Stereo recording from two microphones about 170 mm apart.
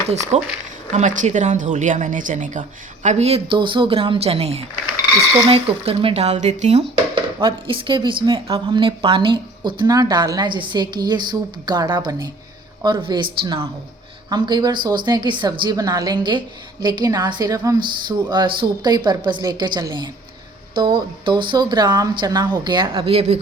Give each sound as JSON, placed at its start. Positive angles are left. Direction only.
{"t": 0.3, "sound": "a woman's voice", "side_deg": -40}
{"t": 7.4, "sound": "a woman's voice", "side_deg": -30}